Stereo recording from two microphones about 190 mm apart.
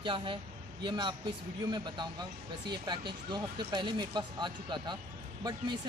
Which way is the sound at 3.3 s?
25° right (ahead or behind).